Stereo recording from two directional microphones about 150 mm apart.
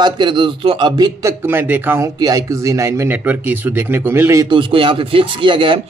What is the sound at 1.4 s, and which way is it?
Speech, 10° right (ahead or behind).